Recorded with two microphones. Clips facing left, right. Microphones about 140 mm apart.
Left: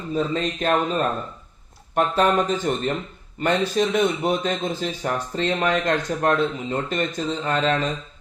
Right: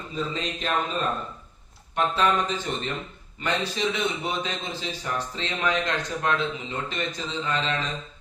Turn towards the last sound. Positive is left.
turn(degrees=45)  # may be behind; listen again after turning